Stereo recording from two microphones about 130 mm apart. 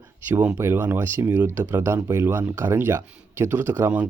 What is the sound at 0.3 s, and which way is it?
Speech, 15° right (ahead or behind).